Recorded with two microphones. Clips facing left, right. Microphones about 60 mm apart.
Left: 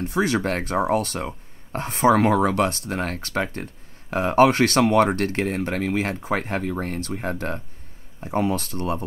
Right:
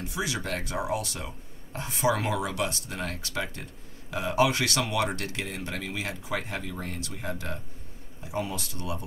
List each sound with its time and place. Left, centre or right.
0.0 s speech: left